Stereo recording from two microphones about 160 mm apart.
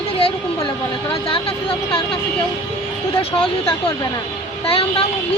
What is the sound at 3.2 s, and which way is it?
Speech, 35° left (ahead or behind).